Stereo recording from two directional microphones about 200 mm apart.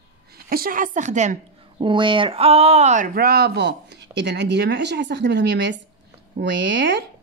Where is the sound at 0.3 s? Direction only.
50° right (ahead or behind).